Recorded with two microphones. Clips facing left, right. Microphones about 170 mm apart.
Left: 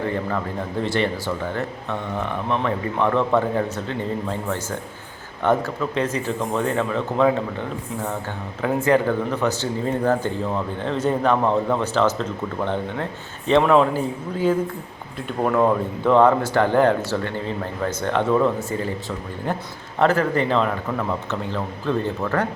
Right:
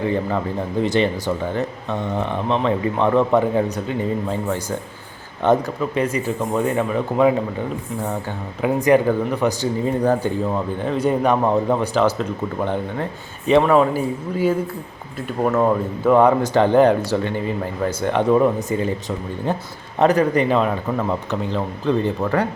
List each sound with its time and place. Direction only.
0.0 s speech: 20° right (ahead or behind)
8.6 s speech: 15° right (ahead or behind)